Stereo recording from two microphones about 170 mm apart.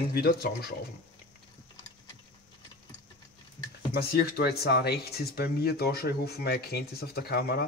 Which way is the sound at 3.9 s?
65° left (ahead or behind).